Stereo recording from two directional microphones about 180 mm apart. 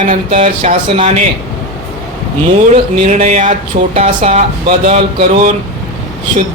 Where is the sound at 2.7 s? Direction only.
40° right (ahead or behind).